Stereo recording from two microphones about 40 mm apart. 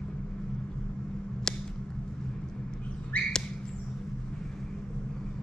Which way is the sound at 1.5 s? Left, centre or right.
Centre.